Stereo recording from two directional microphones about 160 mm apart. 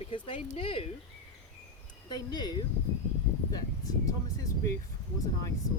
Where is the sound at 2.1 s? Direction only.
25° left (ahead or behind).